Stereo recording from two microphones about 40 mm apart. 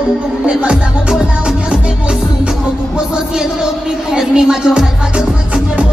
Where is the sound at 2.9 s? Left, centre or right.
Centre.